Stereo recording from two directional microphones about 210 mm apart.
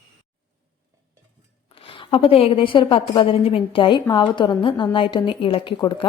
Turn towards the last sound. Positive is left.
turn(degrees=20)  # may be behind; listen again after turning